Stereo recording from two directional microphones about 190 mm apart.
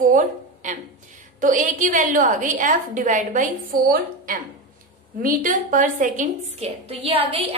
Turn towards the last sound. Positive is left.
turn(degrees=-30)  # may be behind; listen again after turning